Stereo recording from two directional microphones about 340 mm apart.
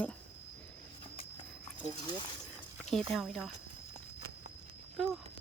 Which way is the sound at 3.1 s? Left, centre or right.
Centre.